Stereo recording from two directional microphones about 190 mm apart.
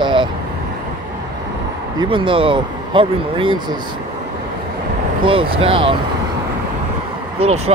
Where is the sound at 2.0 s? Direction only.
25° right (ahead or behind).